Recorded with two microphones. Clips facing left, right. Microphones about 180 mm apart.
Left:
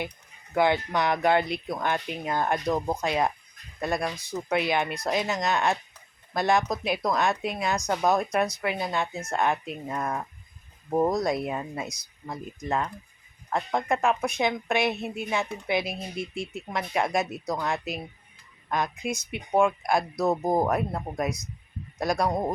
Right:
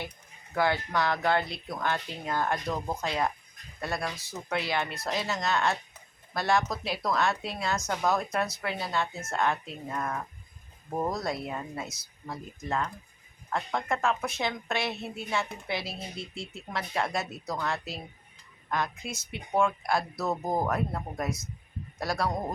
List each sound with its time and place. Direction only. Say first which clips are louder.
0.5 s speech: left 4 dB; 20° left (ahead or behind)